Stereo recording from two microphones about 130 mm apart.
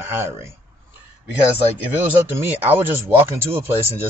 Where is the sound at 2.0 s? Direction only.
15° right (ahead or behind).